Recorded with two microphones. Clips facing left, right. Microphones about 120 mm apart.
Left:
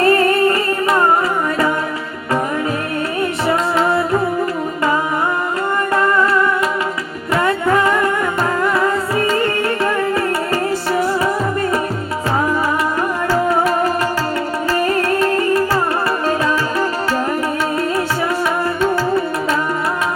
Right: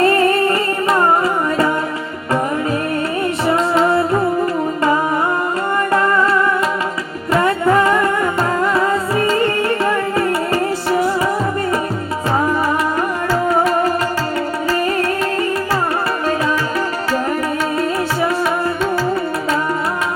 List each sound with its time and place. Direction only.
0.0 s music: 25° right (ahead or behind)